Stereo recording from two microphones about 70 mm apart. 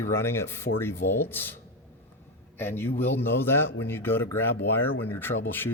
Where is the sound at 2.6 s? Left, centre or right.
Left.